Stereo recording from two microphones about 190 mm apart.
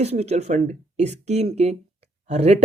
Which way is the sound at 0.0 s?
35° right (ahead or behind).